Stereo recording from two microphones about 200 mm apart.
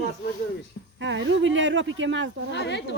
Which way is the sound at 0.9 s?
65° right (ahead or behind).